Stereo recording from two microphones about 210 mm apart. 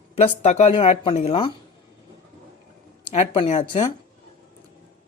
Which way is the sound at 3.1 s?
30° left (ahead or behind).